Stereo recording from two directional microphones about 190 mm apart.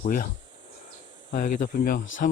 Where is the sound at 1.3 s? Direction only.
45° left (ahead or behind).